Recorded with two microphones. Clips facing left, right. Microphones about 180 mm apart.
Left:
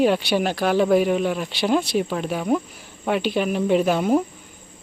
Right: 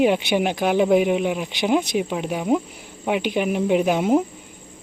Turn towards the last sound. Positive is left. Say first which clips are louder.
# even
turn(degrees=-20)  # may be behind; listen again after turning